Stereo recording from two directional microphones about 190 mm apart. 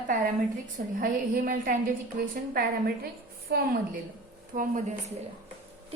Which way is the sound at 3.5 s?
55° right (ahead or behind).